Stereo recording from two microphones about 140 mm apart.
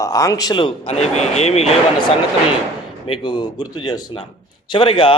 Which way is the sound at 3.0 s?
35° left (ahead or behind).